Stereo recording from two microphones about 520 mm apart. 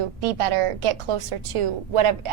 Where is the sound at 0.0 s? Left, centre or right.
Right.